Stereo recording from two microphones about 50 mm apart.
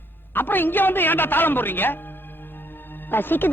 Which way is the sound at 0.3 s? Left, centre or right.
Left.